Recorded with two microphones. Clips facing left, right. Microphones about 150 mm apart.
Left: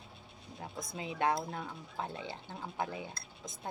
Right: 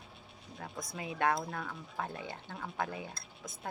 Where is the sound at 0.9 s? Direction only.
20° left (ahead or behind).